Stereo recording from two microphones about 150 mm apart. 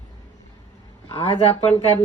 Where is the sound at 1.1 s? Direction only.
35° left (ahead or behind).